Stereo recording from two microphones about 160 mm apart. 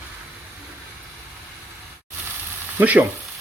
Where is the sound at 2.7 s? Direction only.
10° right (ahead or behind).